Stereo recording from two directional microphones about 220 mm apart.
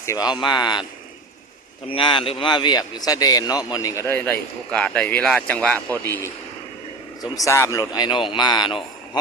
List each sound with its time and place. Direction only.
0.0 s speech: 15° left (ahead or behind)
1.9 s a man's voice: 25° left (ahead or behind)